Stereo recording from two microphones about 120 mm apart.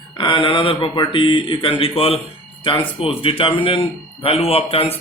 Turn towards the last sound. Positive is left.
turn(degrees=55)  # may be behind; listen again after turning